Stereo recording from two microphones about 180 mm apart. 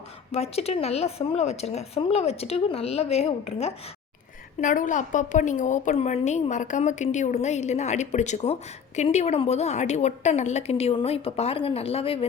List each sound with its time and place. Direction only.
0.3 s a woman's voice: 35° left (ahead or behind)
4.6 s a woman's voice: 45° left (ahead or behind)